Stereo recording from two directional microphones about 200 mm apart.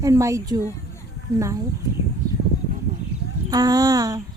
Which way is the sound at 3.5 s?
20° right (ahead or behind).